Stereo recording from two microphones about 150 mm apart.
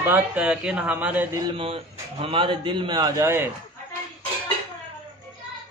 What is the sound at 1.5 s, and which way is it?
A man's voice, 40° right (ahead or behind).